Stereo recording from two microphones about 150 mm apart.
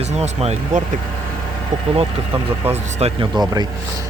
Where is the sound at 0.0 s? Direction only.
45° right (ahead or behind).